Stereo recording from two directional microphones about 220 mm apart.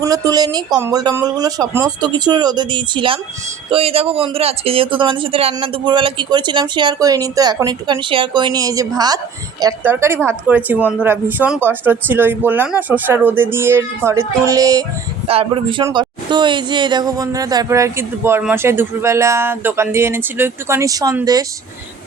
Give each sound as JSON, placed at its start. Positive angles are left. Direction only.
{"t": 0.0, "sound": "speech", "side_deg": -15}